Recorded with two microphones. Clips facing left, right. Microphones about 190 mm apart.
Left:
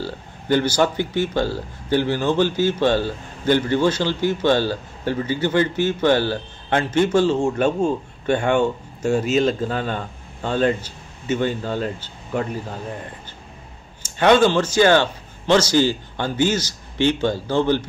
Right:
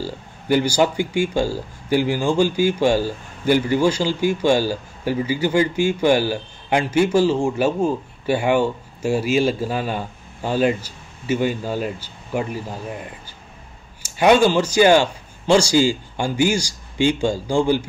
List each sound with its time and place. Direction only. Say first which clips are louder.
0.0 s speech: even; 10° right (ahead or behind)
14.0 s a man's voice: even; 10° right (ahead or behind)